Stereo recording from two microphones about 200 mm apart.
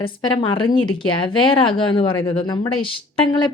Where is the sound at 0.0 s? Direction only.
25° left (ahead or behind).